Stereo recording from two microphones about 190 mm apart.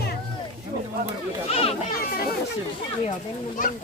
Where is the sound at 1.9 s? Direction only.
50° left (ahead or behind).